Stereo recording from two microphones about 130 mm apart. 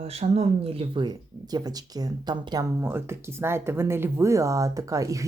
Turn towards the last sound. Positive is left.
turn(degrees=-25)  # may be behind; listen again after turning